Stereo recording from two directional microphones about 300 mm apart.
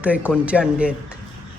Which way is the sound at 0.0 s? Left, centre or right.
Centre.